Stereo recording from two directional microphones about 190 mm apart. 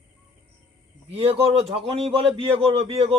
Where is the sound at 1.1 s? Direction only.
30° right (ahead or behind).